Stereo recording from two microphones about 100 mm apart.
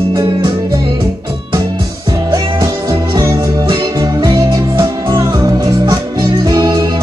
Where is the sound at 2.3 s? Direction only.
35° right (ahead or behind).